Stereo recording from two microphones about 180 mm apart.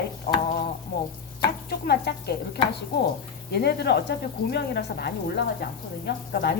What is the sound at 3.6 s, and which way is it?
A woman's voice, 65° left (ahead or behind).